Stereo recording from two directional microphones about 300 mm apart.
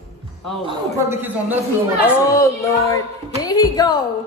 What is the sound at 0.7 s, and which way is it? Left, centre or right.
Speech, centre.